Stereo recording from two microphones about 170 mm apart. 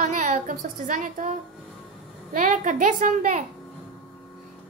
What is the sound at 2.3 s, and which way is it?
A woman's voice, 45° right (ahead or behind).